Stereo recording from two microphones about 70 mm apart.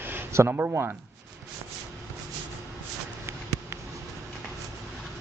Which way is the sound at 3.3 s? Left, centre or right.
Right.